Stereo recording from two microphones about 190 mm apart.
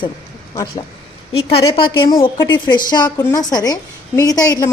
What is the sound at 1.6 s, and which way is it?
A woman's voice, 20° left (ahead or behind).